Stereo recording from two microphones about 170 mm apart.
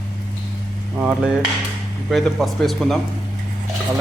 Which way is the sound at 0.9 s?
10° right (ahead or behind).